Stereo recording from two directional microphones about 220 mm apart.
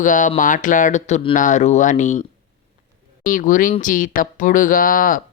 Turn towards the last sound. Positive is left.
turn(degrees=40)  # may be behind; listen again after turning